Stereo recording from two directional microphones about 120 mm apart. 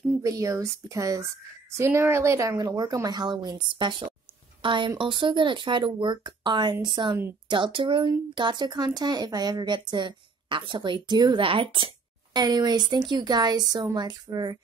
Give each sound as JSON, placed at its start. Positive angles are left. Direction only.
{"t": 0.2, "sound": "a woman's voice", "side_deg": -25}